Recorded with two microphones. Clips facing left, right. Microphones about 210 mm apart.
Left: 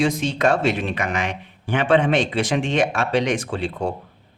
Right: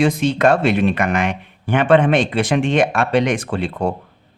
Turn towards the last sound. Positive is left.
turn(degrees=-60)  # may be behind; listen again after turning